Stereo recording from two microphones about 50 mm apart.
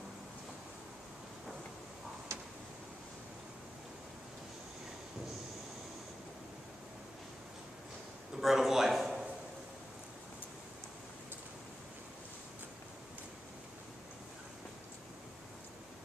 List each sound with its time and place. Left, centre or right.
2.3 s tick-tock: right
8.4 s a man's voice: centre